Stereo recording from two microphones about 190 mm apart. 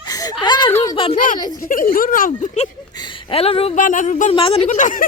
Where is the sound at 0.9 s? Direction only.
30° left (ahead or behind).